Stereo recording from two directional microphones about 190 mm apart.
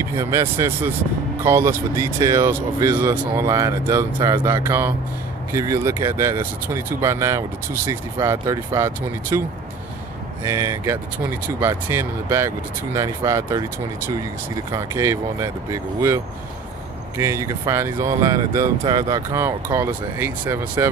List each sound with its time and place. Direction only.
0.1 s speech: 15° right (ahead or behind)
10.4 s speech: 15° right (ahead or behind)
17.2 s speech: 15° right (ahead or behind)